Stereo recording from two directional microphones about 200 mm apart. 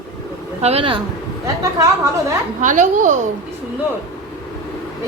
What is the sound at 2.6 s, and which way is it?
Speech, 40° right (ahead or behind).